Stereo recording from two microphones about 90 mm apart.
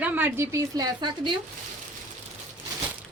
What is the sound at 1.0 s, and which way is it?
Speech, 60° right (ahead or behind).